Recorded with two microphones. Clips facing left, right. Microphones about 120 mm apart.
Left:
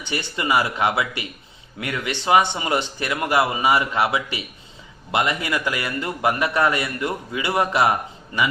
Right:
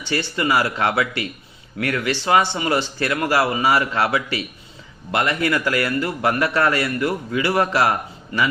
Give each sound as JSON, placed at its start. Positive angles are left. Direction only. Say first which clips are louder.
{"t": 0.0, "sound": "a man's voice", "louder": "right 4 dB", "side_deg": 20}